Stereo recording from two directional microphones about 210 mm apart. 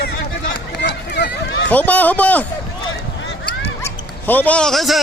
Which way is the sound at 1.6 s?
5° left (ahead or behind).